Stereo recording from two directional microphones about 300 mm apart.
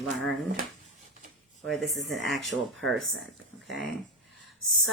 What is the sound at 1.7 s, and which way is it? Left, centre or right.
Speech, centre.